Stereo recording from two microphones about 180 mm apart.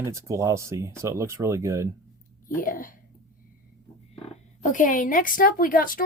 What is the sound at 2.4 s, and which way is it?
Speech, 50° left (ahead or behind).